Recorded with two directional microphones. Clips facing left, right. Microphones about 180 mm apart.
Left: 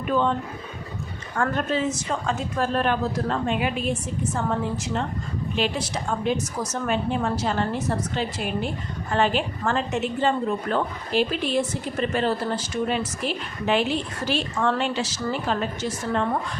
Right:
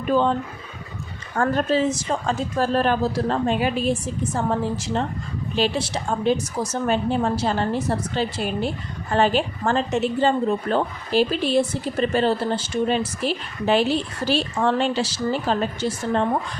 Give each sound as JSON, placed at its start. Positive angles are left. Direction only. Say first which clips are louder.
{"t": 0.1, "sound": "a woman's voice", "louder": "right 3 dB", "side_deg": -35}
{"t": 1.4, "sound": "a woman's voice", "louder": "right 4 dB", "side_deg": -35}